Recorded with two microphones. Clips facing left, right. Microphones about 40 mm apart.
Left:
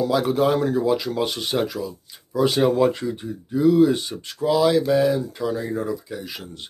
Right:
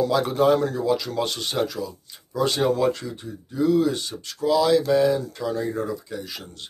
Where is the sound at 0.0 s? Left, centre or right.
Centre.